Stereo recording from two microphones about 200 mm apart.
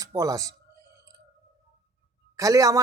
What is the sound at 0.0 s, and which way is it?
Speech, 15° right (ahead or behind).